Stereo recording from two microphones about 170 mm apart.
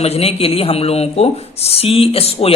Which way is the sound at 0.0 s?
35° left (ahead or behind).